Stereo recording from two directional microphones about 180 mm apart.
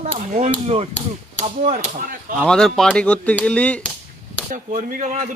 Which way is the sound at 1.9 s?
50° right (ahead or behind).